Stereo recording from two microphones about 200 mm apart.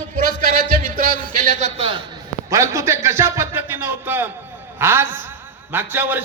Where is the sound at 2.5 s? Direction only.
15° right (ahead or behind).